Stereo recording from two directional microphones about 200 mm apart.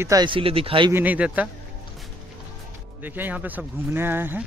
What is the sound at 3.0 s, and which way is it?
Speech, 10° right (ahead or behind).